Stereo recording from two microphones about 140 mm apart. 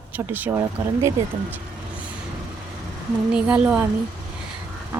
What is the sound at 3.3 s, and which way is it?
Speech, 10° right (ahead or behind).